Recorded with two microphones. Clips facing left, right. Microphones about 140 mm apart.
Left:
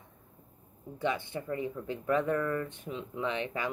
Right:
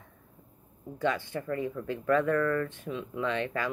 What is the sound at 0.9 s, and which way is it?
Speech, 20° left (ahead or behind).